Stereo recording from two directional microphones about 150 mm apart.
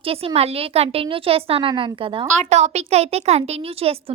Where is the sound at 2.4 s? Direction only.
50° right (ahead or behind).